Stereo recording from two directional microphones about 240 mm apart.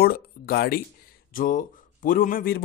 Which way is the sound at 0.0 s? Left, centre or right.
Left.